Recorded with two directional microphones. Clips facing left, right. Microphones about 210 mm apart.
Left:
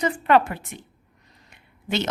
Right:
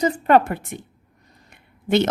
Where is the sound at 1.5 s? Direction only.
55° right (ahead or behind).